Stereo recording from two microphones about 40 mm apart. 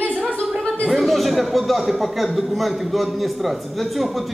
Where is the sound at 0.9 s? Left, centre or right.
Centre.